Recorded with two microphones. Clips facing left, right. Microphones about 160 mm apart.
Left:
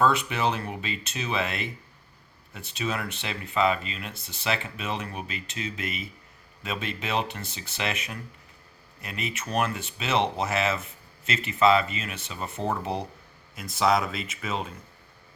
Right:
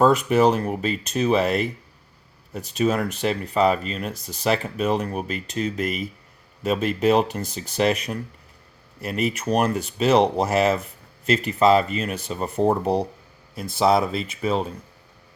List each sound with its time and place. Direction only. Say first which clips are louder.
0.0 s speech: right 7 dB; 45° right (ahead or behind)